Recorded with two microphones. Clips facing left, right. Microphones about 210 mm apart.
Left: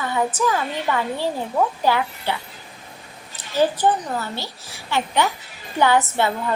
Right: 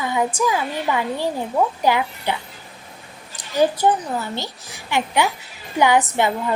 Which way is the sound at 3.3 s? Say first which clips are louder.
Right 1 dB; 15° right (ahead or behind).